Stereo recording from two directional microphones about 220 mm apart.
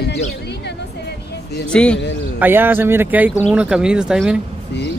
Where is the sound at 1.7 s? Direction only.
5° left (ahead or behind).